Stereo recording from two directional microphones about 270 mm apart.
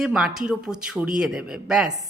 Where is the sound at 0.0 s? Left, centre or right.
Centre.